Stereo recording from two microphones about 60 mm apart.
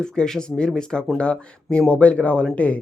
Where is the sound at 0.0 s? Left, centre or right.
Centre.